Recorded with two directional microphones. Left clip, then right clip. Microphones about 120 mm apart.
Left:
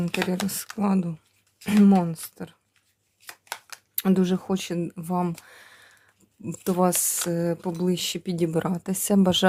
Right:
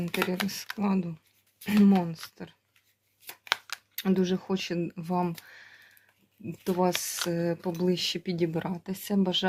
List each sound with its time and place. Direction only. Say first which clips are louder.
0.0 s speech: left 2 dB; 50° left (ahead or behind)
3.5 s a sound: right 8 dB; 5° left (ahead or behind)
3.9 s speech: left 4 dB; 50° left (ahead or behind)
4.7 s speech: left 2 dB; 15° left (ahead or behind)
5.5 s a sound: left 2 dB; 35° left (ahead or behind)
6.4 s speech: left 4 dB; 55° left (ahead or behind)
7.3 s speech: left 4 dB; 30° left (ahead or behind)
8.5 s speech: left 7 dB; 55° left (ahead or behind)
8.8 s speech: left 7 dB; 90° left